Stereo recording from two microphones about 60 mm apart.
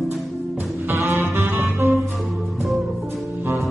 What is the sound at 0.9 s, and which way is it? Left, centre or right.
Saxophone, right.